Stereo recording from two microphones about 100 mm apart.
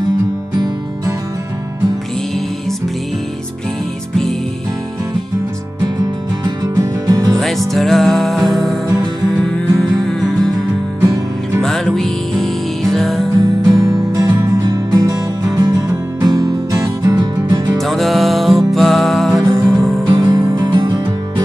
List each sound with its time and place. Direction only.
6.4 s music: 40° right (ahead or behind)
7.3 s music: centre (ahead or behind)
8.8 s music: 35° right (ahead or behind)
9.4 s music: 5° left (ahead or behind)
11.6 s music: 5° left (ahead or behind)
13.3 s music: 35° right (ahead or behind)
17.7 s music: centre (ahead or behind)
20.1 s music: 40° right (ahead or behind)